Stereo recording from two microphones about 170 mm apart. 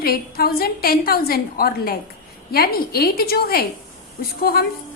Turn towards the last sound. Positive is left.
turn(degrees=65)  # may be behind; listen again after turning